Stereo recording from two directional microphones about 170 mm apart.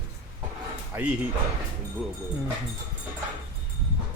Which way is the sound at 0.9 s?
15° right (ahead or behind).